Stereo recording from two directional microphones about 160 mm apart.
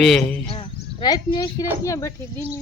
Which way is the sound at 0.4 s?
35° left (ahead or behind).